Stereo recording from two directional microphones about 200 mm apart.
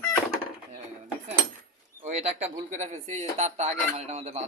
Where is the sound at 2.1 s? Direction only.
35° right (ahead or behind).